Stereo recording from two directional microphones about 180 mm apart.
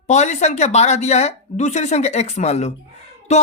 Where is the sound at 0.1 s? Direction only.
40° left (ahead or behind).